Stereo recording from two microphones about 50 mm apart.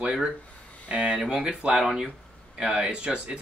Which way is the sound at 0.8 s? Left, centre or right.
Right.